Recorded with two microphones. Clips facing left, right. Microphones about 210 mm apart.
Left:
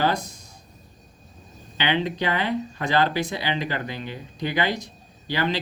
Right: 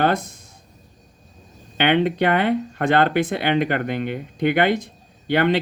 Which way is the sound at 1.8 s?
60° right (ahead or behind).